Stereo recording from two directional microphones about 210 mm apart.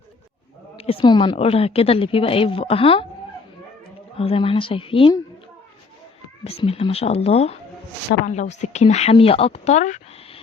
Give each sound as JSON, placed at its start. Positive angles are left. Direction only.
{"t": 0.8, "sound": "a woman's voice", "side_deg": 25}
{"t": 4.2, "sound": "a woman's voice", "side_deg": 25}
{"t": 6.4, "sound": "a woman's voice", "side_deg": 30}